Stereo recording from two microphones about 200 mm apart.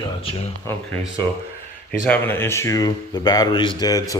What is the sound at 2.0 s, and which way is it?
Speech, 10° left (ahead or behind).